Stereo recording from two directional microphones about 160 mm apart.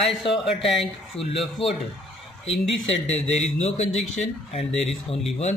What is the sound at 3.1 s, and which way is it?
Speech, 45° left (ahead or behind).